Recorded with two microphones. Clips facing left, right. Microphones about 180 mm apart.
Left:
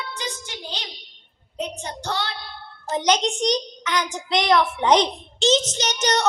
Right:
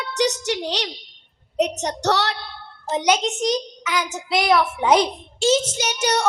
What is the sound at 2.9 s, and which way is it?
A child's voice, 10° right (ahead or behind).